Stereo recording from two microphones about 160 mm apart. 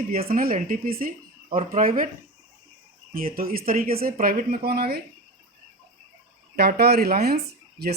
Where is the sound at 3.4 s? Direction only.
65° right (ahead or behind); by 5.0 s 85° right.